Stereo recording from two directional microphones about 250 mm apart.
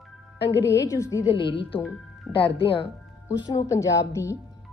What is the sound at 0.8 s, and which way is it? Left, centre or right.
A woman's voice, centre.